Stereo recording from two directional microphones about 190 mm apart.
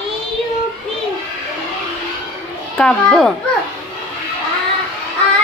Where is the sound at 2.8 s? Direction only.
5° left (ahead or behind).